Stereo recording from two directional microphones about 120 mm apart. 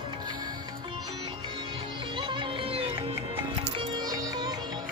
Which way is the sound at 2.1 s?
40° right (ahead or behind).